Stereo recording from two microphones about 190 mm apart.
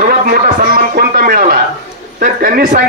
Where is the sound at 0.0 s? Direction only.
50° right (ahead or behind).